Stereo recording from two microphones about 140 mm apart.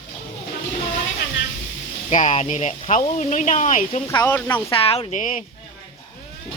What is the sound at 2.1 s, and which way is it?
Speech, 55° left (ahead or behind).